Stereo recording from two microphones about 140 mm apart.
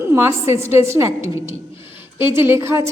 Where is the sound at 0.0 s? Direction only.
20° right (ahead or behind).